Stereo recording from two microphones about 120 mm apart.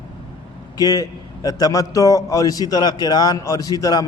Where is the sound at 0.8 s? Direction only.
30° left (ahead or behind).